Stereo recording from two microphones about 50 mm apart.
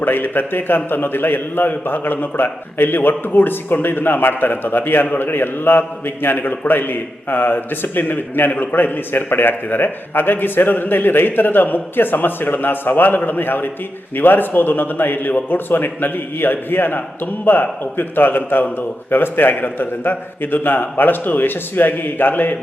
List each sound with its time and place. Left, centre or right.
0.0 s a man's voice: left